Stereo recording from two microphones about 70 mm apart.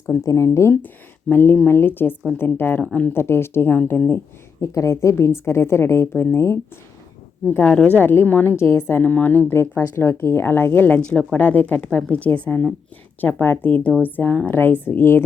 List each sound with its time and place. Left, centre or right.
0.2 s speech: left
1.3 s a woman's voice: left
4.6 s speech: left
7.4 s a woman's voice: centre
8.0 s speech: left
8.5 s speech: left
11.0 s a woman's voice: centre
11.3 s a woman's voice: left
14.5 s speech: left